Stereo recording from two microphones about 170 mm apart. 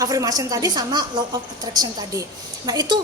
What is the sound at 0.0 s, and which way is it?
A woman's voice, 20° right (ahead or behind).